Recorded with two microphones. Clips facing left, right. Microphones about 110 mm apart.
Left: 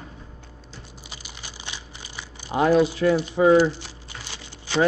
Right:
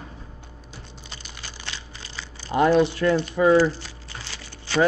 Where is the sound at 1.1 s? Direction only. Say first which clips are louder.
Right 1 dB; 10° left (ahead or behind).